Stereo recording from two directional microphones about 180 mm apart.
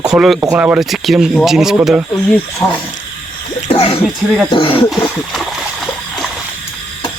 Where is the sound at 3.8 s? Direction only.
30° left (ahead or behind).